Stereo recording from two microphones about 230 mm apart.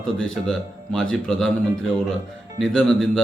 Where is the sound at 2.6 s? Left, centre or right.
Centre.